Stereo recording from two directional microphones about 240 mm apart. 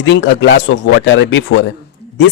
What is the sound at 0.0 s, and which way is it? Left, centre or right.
Speech, left.